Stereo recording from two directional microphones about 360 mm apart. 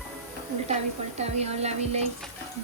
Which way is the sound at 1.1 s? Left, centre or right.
Centre.